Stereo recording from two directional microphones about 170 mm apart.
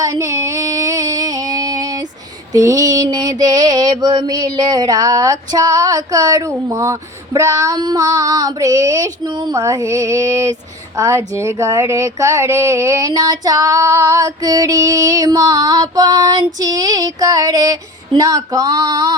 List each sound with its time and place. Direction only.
0.0 s music: 20° right (ahead or behind)
2.5 s speech: 20° right (ahead or behind)